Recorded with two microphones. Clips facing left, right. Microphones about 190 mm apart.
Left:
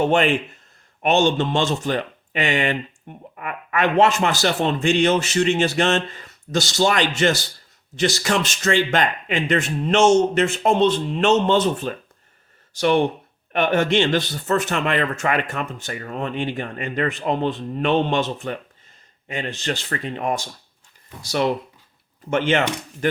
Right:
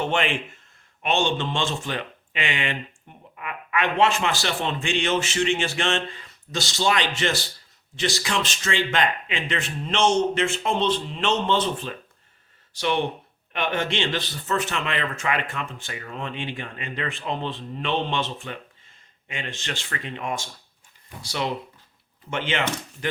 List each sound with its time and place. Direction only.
0.0 s speech: 40° left (ahead or behind)
21.2 s speech: 50° left (ahead or behind)